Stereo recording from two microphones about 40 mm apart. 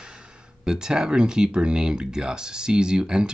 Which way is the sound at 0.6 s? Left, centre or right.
Centre.